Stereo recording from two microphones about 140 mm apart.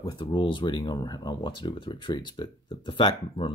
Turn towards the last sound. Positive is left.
turn(degrees=35)  # may be behind; listen again after turning